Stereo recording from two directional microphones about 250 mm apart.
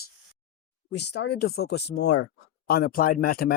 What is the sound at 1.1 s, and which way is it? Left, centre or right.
Speech, left.